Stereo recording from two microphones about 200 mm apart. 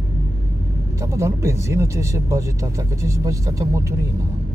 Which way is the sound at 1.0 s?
15° right (ahead or behind).